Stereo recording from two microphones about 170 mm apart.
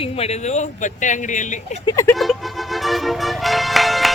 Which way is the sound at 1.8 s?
15° left (ahead or behind).